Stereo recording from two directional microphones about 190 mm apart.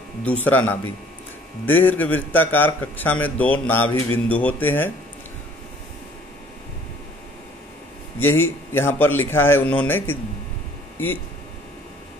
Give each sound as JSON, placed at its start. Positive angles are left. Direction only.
{"t": 0.2, "sound": "speech", "side_deg": 10}
{"t": 8.2, "sound": "speech", "side_deg": 10}